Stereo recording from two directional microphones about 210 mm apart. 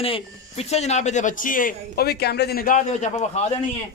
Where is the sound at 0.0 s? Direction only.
30° left (ahead or behind).